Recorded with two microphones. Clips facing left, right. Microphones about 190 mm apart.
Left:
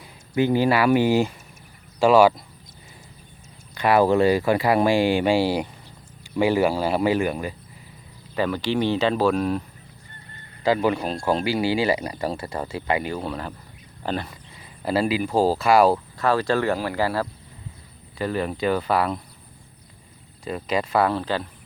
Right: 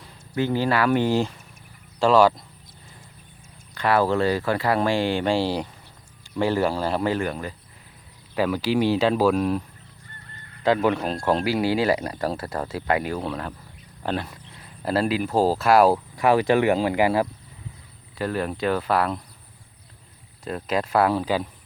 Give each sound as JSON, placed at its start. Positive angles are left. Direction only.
{"t": 0.0, "sound": "speech", "side_deg": 15}
{"t": 3.8, "sound": "speech", "side_deg": 15}
{"t": 8.4, "sound": "speech", "side_deg": -5}
{"t": 16.1, "sound": "speech", "side_deg": -15}
{"t": 18.2, "sound": "speech", "side_deg": 0}
{"t": 20.4, "sound": "speech", "side_deg": 0}